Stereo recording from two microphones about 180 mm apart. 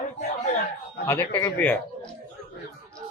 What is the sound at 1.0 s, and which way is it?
Speech, 15° left (ahead or behind).